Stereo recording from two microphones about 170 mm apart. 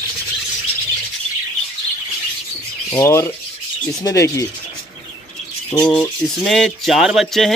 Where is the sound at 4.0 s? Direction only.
20° left (ahead or behind).